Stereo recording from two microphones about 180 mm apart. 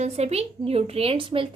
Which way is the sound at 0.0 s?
35° right (ahead or behind).